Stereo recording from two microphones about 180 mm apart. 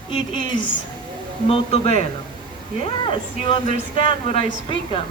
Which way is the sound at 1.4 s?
35° left (ahead or behind).